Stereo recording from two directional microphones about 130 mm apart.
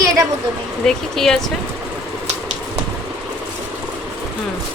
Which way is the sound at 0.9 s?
5° left (ahead or behind).